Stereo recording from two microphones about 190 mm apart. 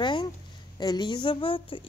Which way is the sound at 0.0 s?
25° left (ahead or behind).